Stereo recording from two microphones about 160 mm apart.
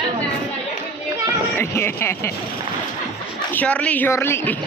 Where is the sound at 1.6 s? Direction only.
15° left (ahead or behind).